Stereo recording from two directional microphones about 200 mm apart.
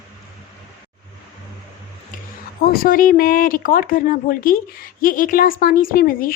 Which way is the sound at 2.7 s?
45° left (ahead or behind).